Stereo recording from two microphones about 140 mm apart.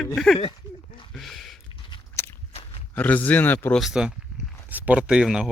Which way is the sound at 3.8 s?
5° right (ahead or behind).